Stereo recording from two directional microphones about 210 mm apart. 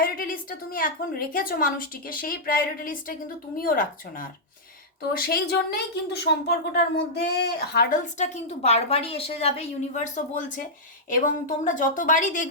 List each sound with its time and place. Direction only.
0.0 s a woman's voice: 45° left (ahead or behind)